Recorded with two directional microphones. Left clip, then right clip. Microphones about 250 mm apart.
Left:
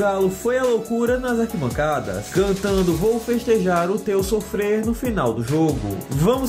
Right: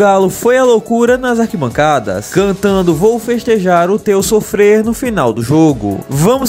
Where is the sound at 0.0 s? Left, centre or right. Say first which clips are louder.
Right 11 dB; right.